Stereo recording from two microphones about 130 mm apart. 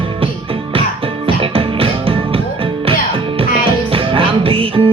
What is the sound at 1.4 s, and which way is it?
Music, 45° right (ahead or behind).